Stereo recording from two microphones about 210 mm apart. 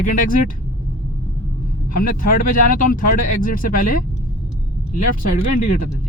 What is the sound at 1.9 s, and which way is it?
Speech, 40° left (ahead or behind).